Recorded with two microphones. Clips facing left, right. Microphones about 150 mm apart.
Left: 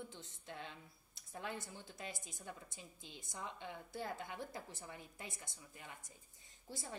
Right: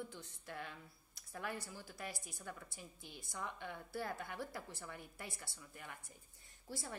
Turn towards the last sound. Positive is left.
turn(degrees=20)  # may be behind; listen again after turning